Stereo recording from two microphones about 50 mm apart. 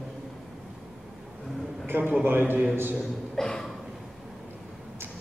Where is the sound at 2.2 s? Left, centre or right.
Right.